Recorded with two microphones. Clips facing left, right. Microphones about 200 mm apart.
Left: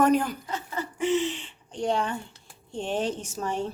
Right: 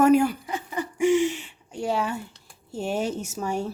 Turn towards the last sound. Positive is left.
turn(degrees=-10)  # may be behind; listen again after turning